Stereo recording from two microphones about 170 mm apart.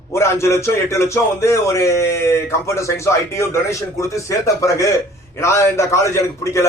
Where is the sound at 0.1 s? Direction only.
15° left (ahead or behind).